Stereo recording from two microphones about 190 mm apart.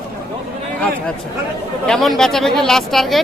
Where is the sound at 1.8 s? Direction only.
Centre (ahead or behind).